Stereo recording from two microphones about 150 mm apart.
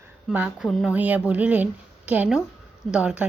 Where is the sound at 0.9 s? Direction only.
10° right (ahead or behind).